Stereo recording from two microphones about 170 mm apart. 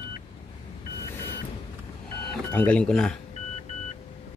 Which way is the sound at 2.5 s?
10° left (ahead or behind).